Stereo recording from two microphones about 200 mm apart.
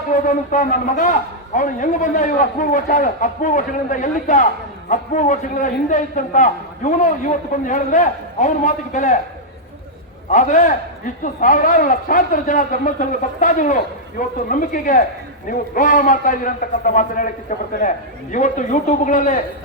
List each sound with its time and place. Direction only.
0.1 s a man's voice: 40° left (ahead or behind)
10.2 s a man's voice: 35° left (ahead or behind)